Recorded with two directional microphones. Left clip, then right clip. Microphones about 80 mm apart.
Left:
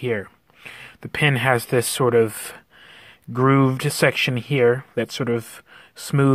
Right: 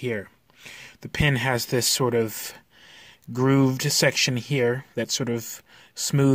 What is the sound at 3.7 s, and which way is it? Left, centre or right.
Speech, right.